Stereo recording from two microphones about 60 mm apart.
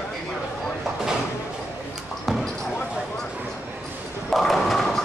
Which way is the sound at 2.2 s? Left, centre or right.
Centre.